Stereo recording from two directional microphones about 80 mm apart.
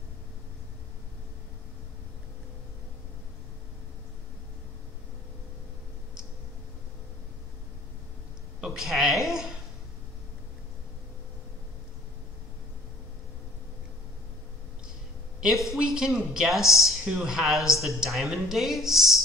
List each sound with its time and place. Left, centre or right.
8.5 s a woman's voice: centre
15.4 s speech: centre